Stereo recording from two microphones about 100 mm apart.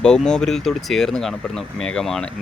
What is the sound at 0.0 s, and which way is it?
Speech, 10° left (ahead or behind).